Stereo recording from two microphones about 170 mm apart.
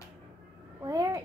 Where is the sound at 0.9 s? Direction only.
20° right (ahead or behind).